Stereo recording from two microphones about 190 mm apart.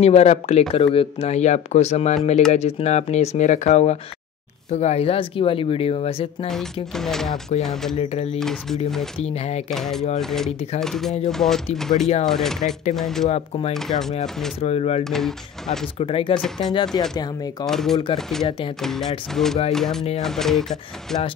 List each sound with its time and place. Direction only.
0.0 s speech: 35° left (ahead or behind)
6.4 s speech: centre (ahead or behind)
8.0 s speech: 35° left (ahead or behind)
8.4 s speech: centre (ahead or behind)
9.2 s speech: 35° left (ahead or behind)
9.7 s speech: centre (ahead or behind)
13.3 s speech: 35° left (ahead or behind)
15.0 s speech: centre (ahead or behind)
16.0 s speech: 30° left (ahead or behind)
16.3 s speech: centre (ahead or behind)
16.9 s speech: 20° left (ahead or behind)
17.6 s speech: centre (ahead or behind)